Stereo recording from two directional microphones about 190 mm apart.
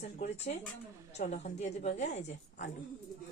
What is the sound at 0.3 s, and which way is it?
Speech, 35° left (ahead or behind).